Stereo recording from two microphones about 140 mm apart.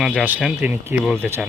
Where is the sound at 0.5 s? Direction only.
10° right (ahead or behind).